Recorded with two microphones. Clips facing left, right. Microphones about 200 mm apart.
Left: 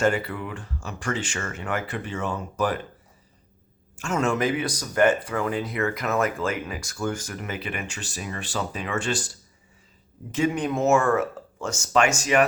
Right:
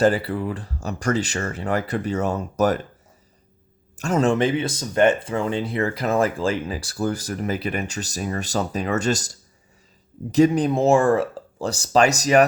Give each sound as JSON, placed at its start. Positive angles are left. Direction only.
{"t": 0.0, "sound": "speech", "side_deg": -35}
{"t": 3.9, "sound": "speech", "side_deg": -35}
{"t": 10.3, "sound": "speech", "side_deg": -35}